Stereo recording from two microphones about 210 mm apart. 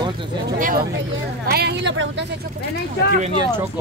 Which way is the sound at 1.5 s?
50° right (ahead or behind).